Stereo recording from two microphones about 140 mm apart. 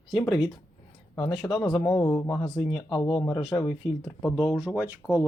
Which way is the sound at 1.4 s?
25° left (ahead or behind).